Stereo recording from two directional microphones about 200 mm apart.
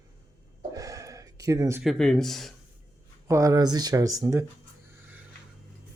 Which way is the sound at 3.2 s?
15° right (ahead or behind).